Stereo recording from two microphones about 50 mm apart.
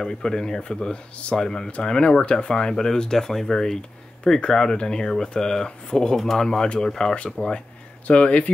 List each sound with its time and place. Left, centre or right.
0.0 s speech: centre
8.1 s speech: left